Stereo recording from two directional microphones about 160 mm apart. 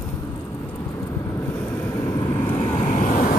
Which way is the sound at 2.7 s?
50° left (ahead or behind).